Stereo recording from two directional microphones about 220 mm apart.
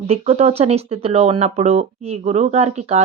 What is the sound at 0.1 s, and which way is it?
Speech, 30° right (ahead or behind).